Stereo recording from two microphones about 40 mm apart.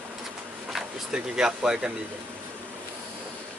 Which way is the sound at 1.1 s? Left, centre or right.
Centre.